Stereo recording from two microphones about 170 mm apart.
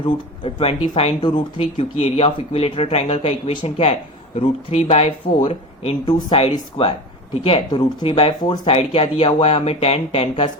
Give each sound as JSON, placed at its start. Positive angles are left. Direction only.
{"t": 0.0, "sound": "speech", "side_deg": 35}